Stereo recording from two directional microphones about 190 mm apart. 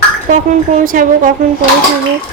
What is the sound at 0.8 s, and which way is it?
Speech, 45° right (ahead or behind).